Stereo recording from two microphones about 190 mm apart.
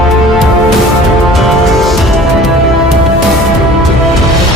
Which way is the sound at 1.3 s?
Centre (ahead or behind).